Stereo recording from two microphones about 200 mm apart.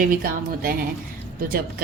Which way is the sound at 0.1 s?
45° right (ahead or behind).